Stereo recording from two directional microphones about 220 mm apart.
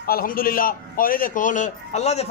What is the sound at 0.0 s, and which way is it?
A man's voice, 40° left (ahead or behind).